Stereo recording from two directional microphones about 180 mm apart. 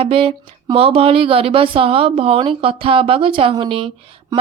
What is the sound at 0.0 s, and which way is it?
Speech, 30° right (ahead or behind).